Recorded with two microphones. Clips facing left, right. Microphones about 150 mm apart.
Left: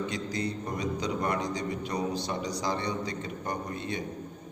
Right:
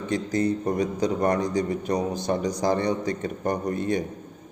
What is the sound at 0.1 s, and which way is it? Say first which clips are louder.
A man's voice: right 9 dB; 50° right (ahead or behind).